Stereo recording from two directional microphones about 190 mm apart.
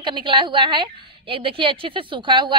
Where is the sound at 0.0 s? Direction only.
25° right (ahead or behind).